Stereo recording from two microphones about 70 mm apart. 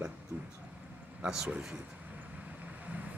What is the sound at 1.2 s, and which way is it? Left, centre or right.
Speech, centre.